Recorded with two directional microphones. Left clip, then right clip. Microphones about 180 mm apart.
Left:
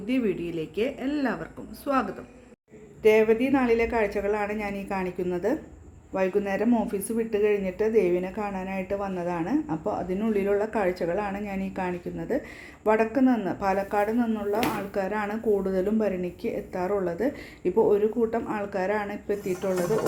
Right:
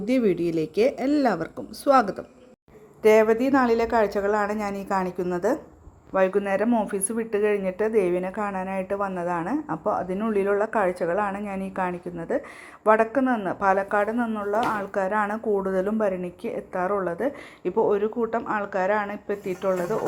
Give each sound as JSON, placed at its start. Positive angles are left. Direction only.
{"t": 0.0, "sound": "speech", "side_deg": -35}
{"t": 3.0, "sound": "a woman's voice", "side_deg": -25}
{"t": 14.5, "sound": "a woman's voice", "side_deg": -15}